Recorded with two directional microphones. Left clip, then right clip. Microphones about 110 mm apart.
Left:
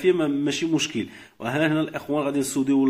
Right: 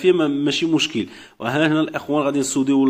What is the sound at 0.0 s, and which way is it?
A man's voice, 20° right (ahead or behind).